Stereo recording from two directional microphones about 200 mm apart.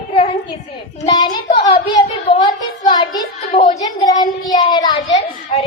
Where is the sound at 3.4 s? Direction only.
40° left (ahead or behind).